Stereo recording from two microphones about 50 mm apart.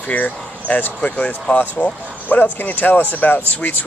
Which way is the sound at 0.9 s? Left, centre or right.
Left.